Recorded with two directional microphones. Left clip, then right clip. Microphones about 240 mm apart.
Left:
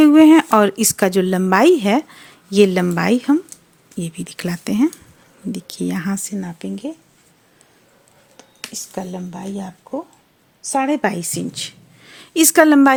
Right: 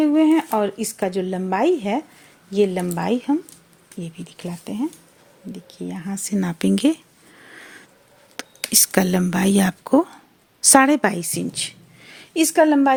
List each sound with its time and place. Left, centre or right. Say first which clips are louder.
0.0 s a woman's voice: left 7 dB; left
6.4 s speech: right 6 dB; centre
6.7 s speech: right 11 dB; right
8.4 s a woman's voice: right 11 dB; right
10.8 s speech: right 1 dB; centre
11.1 s a sound: left 1 dB; centre
12.3 s a woman's voice: left 4 dB; centre